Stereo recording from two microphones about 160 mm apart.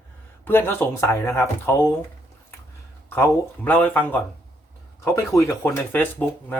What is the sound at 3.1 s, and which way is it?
Speech, 10° left (ahead or behind).